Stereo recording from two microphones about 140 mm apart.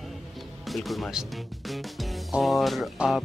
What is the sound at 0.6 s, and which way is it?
Speech, centre (ahead or behind).